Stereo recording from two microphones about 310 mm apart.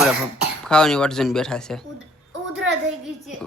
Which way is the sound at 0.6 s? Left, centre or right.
Centre.